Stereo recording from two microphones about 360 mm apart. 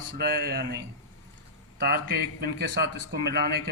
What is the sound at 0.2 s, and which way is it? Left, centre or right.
Speech, right.